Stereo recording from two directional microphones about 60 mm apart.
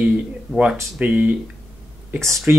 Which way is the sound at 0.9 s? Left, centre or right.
Right.